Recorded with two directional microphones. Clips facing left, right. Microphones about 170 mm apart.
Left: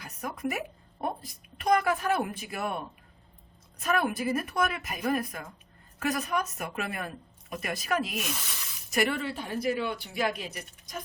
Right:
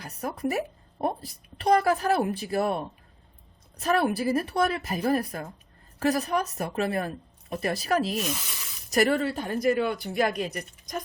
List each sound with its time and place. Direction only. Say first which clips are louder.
0.0 s a woman's voice: right 4 dB; 35° right (ahead or behind)